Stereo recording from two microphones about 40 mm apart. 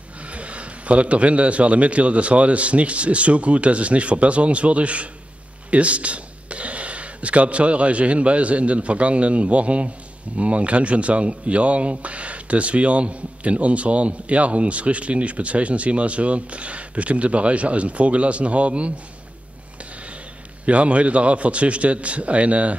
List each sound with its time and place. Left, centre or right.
0.3 s speech: right
20.6 s speech: right